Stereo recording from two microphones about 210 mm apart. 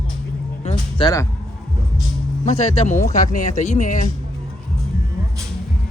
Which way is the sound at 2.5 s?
30° left (ahead or behind).